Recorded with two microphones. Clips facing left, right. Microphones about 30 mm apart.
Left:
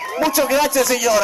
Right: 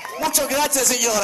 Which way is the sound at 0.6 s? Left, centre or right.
Left.